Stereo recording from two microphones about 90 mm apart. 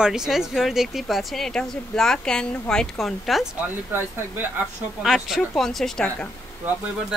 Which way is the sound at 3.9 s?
25° right (ahead or behind).